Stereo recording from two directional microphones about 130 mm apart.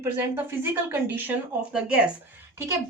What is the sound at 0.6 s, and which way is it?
Speech, 15° right (ahead or behind).